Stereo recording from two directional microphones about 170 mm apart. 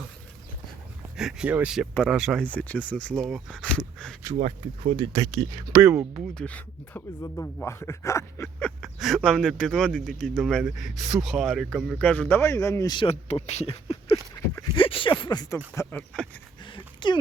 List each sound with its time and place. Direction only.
1.1 s speech: 5° right (ahead or behind)
4.4 s speech: 45° right (ahead or behind)
4.9 s speech: 25° right (ahead or behind)
5.8 s speech: 10° right (ahead or behind)
6.3 s speech: 5° left (ahead or behind)
16.6 s a sound: 30° left (ahead or behind)